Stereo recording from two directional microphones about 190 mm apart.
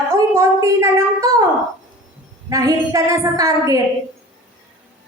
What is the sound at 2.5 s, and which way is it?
Speech, 15° right (ahead or behind).